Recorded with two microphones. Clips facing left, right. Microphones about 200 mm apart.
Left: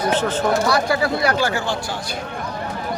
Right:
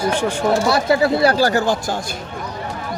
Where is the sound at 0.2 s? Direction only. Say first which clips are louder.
Even; 10° right (ahead or behind).